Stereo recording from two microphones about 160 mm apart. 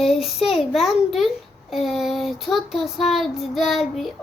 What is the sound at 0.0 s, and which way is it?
Child singing, centre (ahead or behind).